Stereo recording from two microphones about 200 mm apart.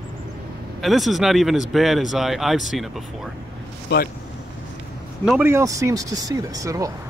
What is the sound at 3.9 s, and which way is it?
Speech, 55° left (ahead or behind).